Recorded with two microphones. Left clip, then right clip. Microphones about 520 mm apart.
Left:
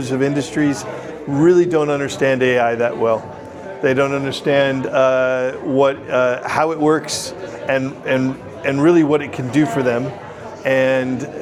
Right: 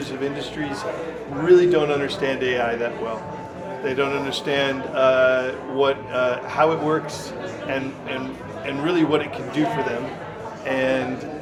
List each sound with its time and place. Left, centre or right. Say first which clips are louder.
0.2 s a man's voice: left 9 dB; left
10.7 s a man's voice: left 7 dB; left